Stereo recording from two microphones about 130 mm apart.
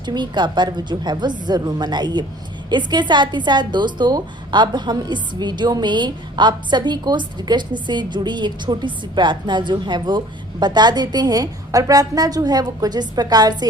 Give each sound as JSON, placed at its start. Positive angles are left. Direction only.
{"t": 0.0, "sound": "a woman's voice", "side_deg": -35}